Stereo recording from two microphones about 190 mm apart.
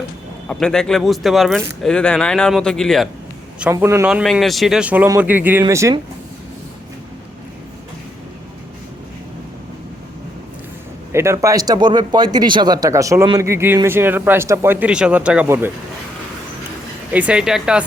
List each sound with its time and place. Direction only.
0.4 s a man's voice: 5° left (ahead or behind)
3.6 s speech: 10° right (ahead or behind)
4.1 s speech: centre (ahead or behind); by 6.0 s 15° right (ahead or behind)
11.1 s speech: 15° right (ahead or behind)
17.1 s a man's voice: 5° right (ahead or behind)